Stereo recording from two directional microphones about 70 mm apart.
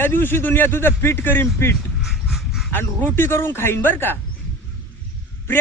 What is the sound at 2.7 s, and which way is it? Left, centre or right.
Speech, left.